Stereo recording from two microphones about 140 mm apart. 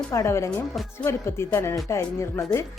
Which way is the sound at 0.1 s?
20° left (ahead or behind).